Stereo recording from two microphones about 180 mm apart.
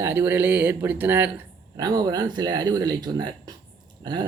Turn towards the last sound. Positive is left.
turn(degrees=-25)  # may be behind; listen again after turning